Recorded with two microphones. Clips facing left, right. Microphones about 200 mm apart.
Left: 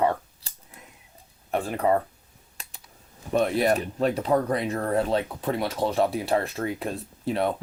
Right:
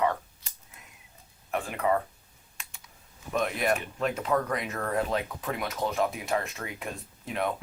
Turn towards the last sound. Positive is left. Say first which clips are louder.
# left 5 dB
turn(degrees=35)  # may be behind; listen again after turning